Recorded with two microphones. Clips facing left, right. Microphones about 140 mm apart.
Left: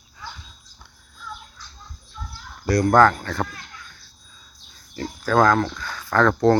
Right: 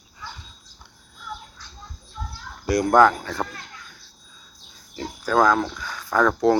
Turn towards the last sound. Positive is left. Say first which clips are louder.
# left 1 dB
turn(degrees=-10)  # may be behind; listen again after turning